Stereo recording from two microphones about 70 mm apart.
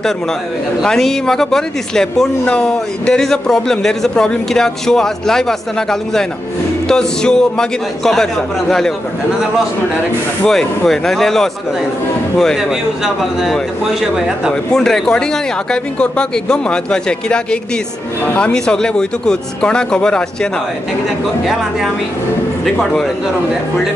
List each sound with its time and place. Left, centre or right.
0.8 s speech: centre
10.4 s speech: centre
12.5 s speech: centre
14.5 s speech: centre
18.5 s speech: centre